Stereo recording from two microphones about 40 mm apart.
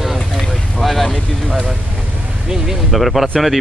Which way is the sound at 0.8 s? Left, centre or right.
Centre.